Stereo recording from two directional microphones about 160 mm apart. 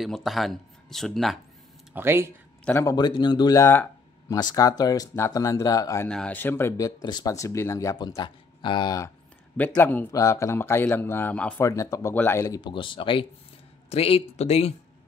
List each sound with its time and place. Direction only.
0.0 s speech: centre (ahead or behind)
2.0 s speech: 15° right (ahead or behind)
2.6 s speech: 15° left (ahead or behind)
6.0 s speech: 5° left (ahead or behind); by 9.1 s 25° left (ahead or behind)
9.6 s a man's voice: 10° left (ahead or behind); by 14.7 s 40° left (ahead or behind)